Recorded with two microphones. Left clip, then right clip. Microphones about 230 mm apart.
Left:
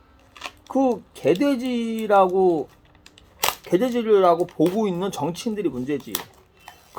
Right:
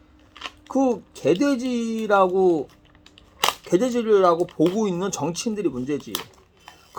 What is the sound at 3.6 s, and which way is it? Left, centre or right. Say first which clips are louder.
Speech: left 2 dB; centre.